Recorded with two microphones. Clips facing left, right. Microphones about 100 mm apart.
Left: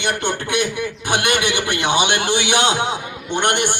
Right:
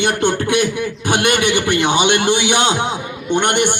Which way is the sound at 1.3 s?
5° left (ahead or behind).